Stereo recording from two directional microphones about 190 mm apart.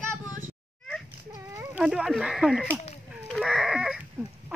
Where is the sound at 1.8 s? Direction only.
5° right (ahead or behind).